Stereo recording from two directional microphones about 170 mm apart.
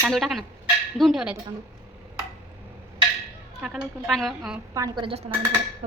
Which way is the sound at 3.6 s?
5° right (ahead or behind).